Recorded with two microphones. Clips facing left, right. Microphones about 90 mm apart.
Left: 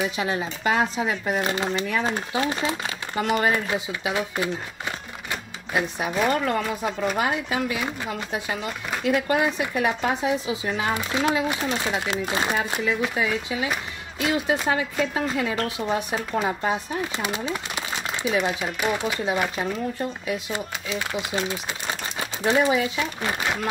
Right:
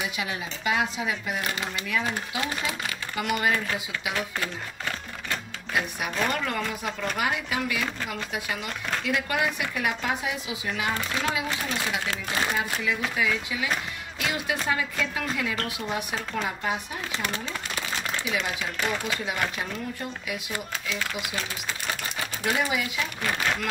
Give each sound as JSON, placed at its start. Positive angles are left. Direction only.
{"t": 0.2, "sound": "speech", "side_deg": 35}
{"t": 3.5, "sound": "speech", "side_deg": 20}
{"t": 9.4, "sound": "speech", "side_deg": 25}
{"t": 10.9, "sound": "speech", "side_deg": 20}
{"t": 13.1, "sound": "speech", "side_deg": 30}
{"t": 14.7, "sound": "speech", "side_deg": 35}
{"t": 17.2, "sound": "a sound", "side_deg": 15}
{"t": 18.4, "sound": "speech", "side_deg": 20}
{"t": 20.2, "sound": "speech", "side_deg": 30}